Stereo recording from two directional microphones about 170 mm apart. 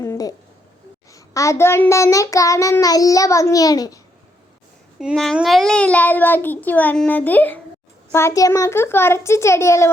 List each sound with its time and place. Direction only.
0.0 s a sound: 20° left (ahead or behind)
1.1 s child singing: 20° left (ahead or behind)
4.9 s a child's voice: centre (ahead or behind); by 9.9 s 15° left (ahead or behind)